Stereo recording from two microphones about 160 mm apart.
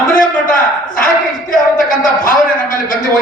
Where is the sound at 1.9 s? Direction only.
60° left (ahead or behind).